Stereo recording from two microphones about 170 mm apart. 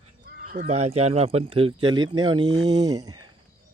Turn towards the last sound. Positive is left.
turn(degrees=-20)  # may be behind; listen again after turning